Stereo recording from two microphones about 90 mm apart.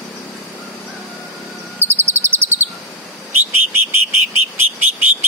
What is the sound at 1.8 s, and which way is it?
Bird, 25° right (ahead or behind).